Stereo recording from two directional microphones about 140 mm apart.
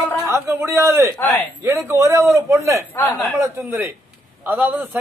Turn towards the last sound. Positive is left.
turn(degrees=-15)  # may be behind; listen again after turning